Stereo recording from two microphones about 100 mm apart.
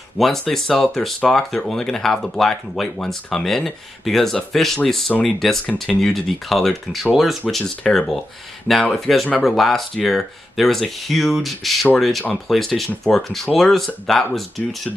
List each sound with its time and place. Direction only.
0.2 s speech: centre (ahead or behind)